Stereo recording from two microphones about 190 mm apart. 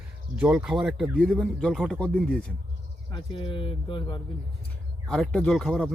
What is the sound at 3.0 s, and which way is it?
Speech, 25° left (ahead or behind).